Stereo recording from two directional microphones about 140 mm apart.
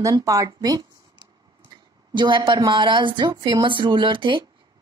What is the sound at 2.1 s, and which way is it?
Speech, 35° right (ahead or behind).